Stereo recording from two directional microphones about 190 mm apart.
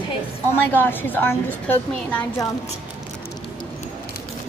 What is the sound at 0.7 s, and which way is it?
A woman's voice, 10° left (ahead or behind).